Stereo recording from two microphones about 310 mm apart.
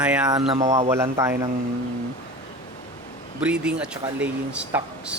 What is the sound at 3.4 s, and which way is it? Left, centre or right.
Speech, centre.